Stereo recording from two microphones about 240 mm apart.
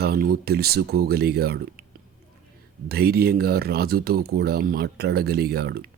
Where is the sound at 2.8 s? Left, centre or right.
Right.